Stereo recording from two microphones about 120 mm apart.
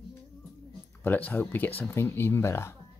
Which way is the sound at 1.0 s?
15° left (ahead or behind).